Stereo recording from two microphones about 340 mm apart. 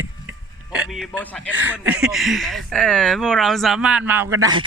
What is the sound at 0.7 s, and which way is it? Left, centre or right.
Speech, centre.